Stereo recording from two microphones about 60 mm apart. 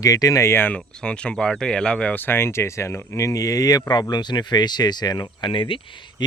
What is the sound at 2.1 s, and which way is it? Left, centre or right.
Speech, left.